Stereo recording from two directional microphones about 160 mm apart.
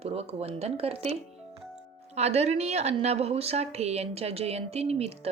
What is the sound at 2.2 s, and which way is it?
A woman's voice, 40° right (ahead or behind).